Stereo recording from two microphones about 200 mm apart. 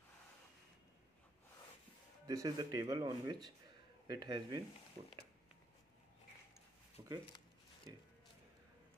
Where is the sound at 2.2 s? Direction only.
20° right (ahead or behind).